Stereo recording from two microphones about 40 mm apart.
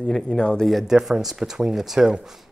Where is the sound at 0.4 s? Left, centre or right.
Left.